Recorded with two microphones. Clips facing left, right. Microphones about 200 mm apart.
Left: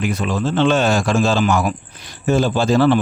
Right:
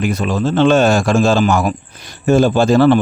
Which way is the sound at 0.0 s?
40° right (ahead or behind).